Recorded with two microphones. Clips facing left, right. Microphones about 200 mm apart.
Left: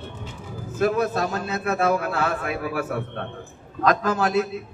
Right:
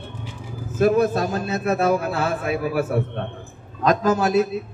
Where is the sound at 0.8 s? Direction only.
25° right (ahead or behind).